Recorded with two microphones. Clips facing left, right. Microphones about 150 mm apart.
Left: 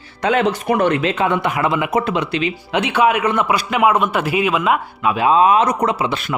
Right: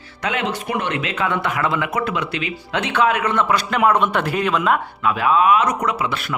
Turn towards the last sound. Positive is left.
turn(degrees=20)  # may be behind; listen again after turning